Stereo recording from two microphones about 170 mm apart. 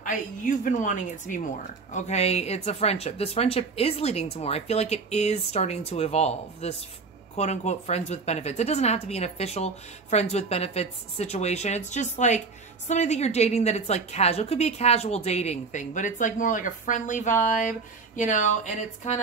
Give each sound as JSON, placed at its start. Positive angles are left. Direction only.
{"t": 0.0, "sound": "a woman's voice", "side_deg": 50}